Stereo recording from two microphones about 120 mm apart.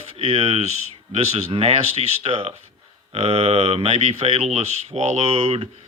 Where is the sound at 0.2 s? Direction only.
55° right (ahead or behind).